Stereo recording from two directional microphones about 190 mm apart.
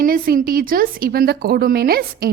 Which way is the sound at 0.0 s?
50° right (ahead or behind).